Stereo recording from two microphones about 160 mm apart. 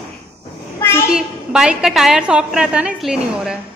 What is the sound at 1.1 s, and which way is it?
A woman's voice, 5° right (ahead or behind).